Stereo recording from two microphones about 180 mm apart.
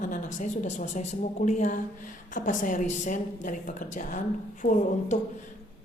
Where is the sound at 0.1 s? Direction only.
45° left (ahead or behind).